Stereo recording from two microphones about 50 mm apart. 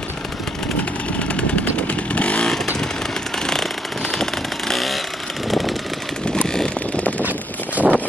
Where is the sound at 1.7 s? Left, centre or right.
Left.